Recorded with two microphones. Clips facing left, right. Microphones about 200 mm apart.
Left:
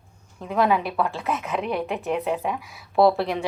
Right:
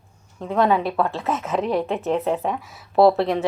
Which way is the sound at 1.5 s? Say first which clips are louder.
Right 6 dB; 30° right (ahead or behind).